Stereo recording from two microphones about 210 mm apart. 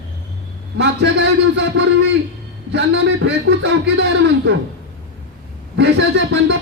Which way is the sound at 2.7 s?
55° right (ahead or behind).